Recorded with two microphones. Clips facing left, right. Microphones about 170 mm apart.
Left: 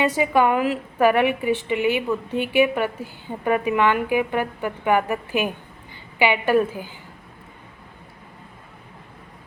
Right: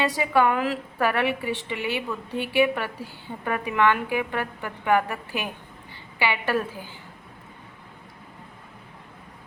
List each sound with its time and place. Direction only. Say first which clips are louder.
0.2 s a woman's voice: left 2 dB; 15° left (ahead or behind)